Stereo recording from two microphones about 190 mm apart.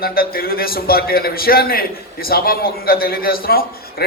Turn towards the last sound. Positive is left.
turn(degrees=50)  # may be behind; listen again after turning